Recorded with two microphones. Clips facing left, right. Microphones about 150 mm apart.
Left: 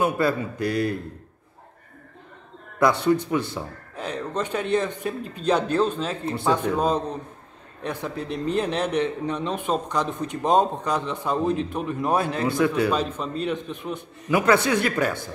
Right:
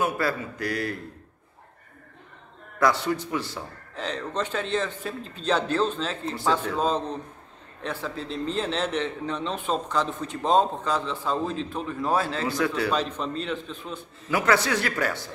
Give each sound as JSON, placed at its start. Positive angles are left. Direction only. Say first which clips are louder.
{"t": 0.0, "sound": "speech", "louder": "left 4 dB", "side_deg": 25}
{"t": 2.8, "sound": "speech", "louder": "left 4 dB", "side_deg": 20}
{"t": 3.9, "sound": "a man's voice", "louder": "left 1 dB", "side_deg": 10}